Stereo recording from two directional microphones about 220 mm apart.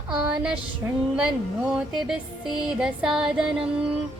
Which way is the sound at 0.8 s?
10° right (ahead or behind).